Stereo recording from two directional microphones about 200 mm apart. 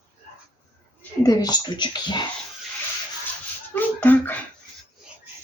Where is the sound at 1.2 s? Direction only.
20° left (ahead or behind).